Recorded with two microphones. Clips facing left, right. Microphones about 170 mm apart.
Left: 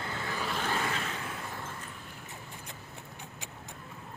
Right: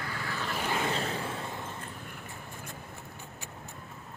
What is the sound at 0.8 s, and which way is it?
Vehicle, 30° right (ahead or behind).